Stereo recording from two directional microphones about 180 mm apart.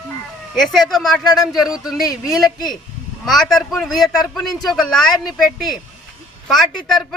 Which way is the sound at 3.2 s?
Centre (ahead or behind).